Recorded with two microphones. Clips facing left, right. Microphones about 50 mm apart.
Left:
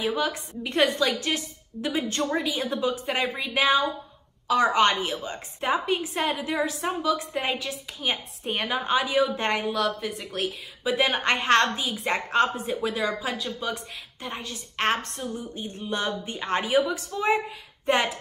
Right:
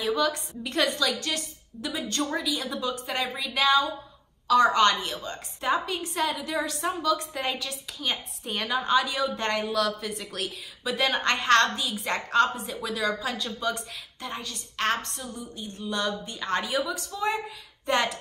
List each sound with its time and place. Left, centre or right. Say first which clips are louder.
0.0 s a woman's voice: right 1 dB; left
13.1 s a woman's voice: left 1 dB; centre